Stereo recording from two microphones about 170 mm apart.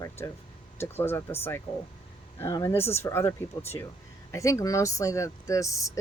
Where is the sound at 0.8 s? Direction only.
15° left (ahead or behind).